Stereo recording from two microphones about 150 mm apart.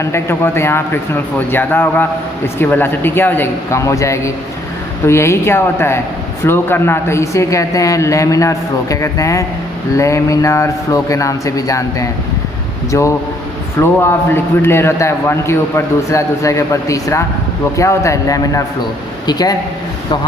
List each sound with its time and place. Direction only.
0.0 s a man's voice: 15° left (ahead or behind)